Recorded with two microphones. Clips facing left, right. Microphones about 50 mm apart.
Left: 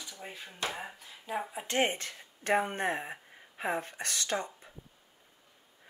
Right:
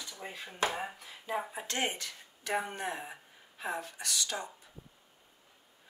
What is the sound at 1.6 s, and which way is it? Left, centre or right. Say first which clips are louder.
Speech: left 9 dB; left.